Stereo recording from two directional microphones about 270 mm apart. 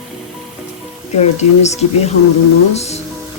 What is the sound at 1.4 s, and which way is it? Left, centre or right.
Speech, left.